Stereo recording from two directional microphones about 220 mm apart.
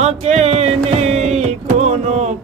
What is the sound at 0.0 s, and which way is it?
Music, 30° right (ahead or behind).